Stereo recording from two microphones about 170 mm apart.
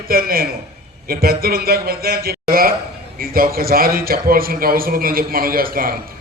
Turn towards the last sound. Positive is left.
turn(degrees=-60)  # may be behind; listen again after turning